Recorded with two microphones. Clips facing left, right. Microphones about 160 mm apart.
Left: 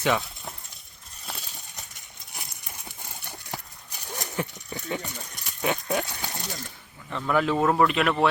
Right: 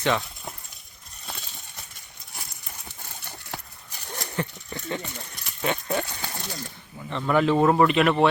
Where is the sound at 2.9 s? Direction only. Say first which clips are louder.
Even; 10° left (ahead or behind).